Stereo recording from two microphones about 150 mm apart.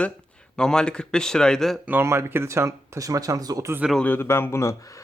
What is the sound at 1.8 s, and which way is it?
Speech, 15° right (ahead or behind).